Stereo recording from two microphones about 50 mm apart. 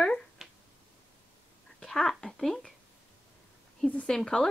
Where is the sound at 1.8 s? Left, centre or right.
Centre.